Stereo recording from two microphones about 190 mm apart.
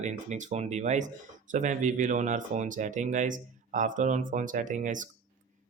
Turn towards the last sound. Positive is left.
turn(degrees=-40)  # may be behind; listen again after turning